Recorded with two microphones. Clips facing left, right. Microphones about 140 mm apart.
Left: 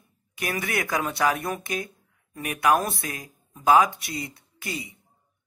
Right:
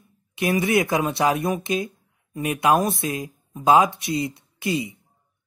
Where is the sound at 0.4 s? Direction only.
25° right (ahead or behind).